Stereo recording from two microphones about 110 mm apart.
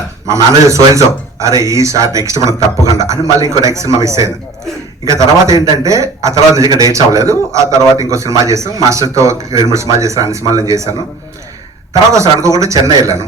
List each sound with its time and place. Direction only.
0.3 s a man's voice: 30° right (ahead or behind)
12.1 s a man's voice: 30° right (ahead or behind)